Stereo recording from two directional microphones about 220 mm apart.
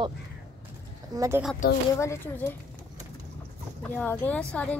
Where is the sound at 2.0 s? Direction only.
10° left (ahead or behind).